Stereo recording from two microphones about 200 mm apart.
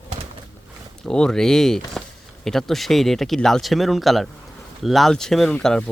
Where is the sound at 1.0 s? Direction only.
5° left (ahead or behind).